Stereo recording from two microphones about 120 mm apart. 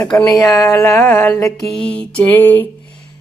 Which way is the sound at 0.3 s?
25° left (ahead or behind).